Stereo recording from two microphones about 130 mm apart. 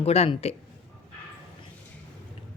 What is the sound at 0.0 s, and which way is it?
Speech, 50° left (ahead or behind).